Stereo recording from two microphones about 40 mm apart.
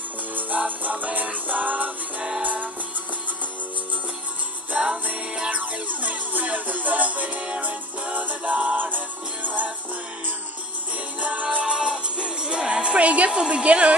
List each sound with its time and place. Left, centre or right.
0.7 s music: right
4.7 s music: centre
5.6 s music: right
11.1 s music: right
11.5 s music: right
13.3 s a woman's voice: right